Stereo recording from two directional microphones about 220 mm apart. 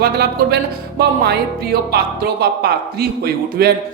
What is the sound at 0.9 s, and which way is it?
Speech, 45° right (ahead or behind).